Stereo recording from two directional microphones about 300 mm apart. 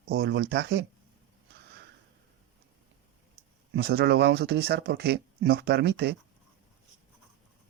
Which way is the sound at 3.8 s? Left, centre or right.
Right.